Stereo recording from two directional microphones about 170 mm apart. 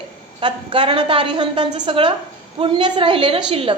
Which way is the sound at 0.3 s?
30° right (ahead or behind).